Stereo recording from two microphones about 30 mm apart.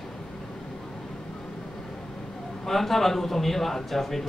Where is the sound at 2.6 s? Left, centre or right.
Centre.